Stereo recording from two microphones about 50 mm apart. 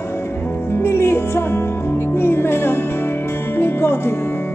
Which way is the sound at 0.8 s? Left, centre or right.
Left.